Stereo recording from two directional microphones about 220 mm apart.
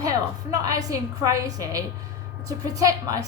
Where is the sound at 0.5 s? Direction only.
15° right (ahead or behind).